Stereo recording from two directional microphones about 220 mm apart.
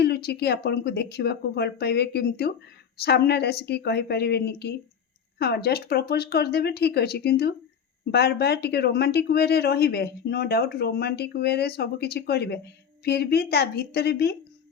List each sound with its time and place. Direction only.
0.0 s speech: 45° left (ahead or behind)